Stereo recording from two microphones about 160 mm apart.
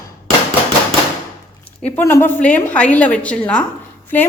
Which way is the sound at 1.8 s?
10° left (ahead or behind).